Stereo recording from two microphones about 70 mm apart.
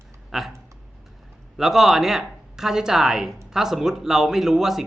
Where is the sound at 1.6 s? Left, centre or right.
Centre.